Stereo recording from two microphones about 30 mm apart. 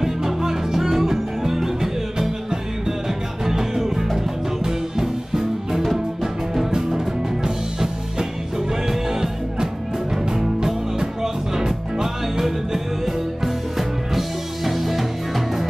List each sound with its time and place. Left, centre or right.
0.0 s music: centre